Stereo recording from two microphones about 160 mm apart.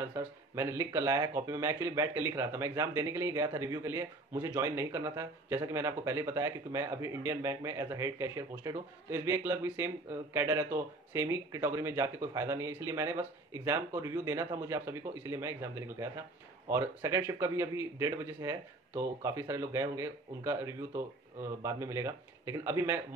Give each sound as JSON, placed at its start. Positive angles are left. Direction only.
{"t": 0.1, "sound": "speech", "side_deg": -15}